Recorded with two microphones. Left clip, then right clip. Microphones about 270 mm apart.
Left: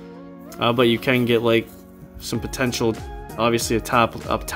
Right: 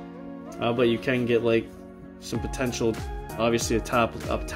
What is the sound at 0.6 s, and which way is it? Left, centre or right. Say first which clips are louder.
Speech: left 5 dB; centre.